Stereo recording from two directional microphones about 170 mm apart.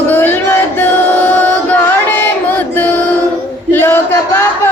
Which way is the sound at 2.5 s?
10° left (ahead or behind).